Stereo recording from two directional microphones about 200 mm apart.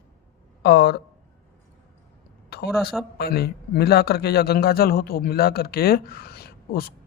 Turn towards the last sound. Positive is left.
turn(degrees=50)  # may be behind; listen again after turning